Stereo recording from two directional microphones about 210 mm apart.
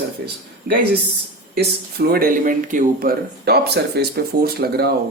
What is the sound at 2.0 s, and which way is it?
Speech, 45° right (ahead or behind).